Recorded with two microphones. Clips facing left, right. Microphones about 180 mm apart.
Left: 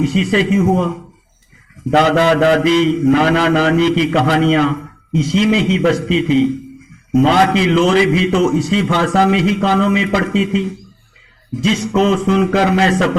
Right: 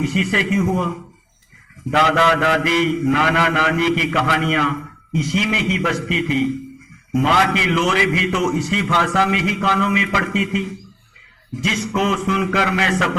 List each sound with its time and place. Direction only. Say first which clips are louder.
0.0 s mantra: left 5 dB; 35° left (ahead or behind)